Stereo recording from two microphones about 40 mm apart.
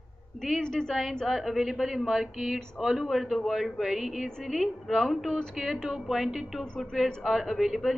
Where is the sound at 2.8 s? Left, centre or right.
Centre.